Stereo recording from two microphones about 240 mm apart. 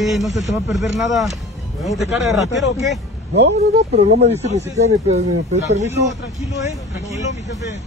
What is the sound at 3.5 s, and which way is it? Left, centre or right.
Speech, right.